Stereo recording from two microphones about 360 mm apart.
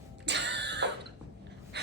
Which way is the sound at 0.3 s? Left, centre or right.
Right.